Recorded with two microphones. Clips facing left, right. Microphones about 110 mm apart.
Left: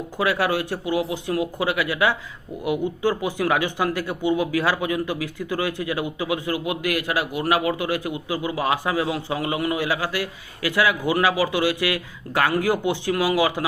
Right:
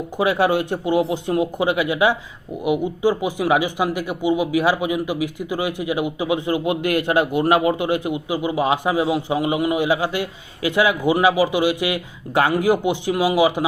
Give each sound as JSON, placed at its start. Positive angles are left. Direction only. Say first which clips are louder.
{"t": 0.2, "sound": "speech", "louder": "right 4 dB", "side_deg": -20}